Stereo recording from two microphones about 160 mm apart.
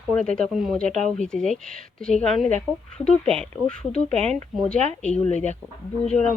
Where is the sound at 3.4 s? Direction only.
5° left (ahead or behind).